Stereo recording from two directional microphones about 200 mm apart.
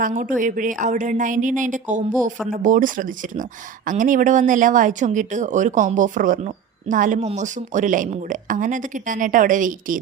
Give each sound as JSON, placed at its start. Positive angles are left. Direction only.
{"t": 0.0, "sound": "speech", "side_deg": -40}